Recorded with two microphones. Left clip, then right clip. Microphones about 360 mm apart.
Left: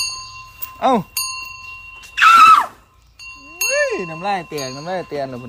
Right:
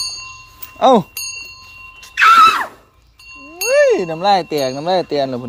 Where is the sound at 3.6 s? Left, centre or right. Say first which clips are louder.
Right 6 dB; centre.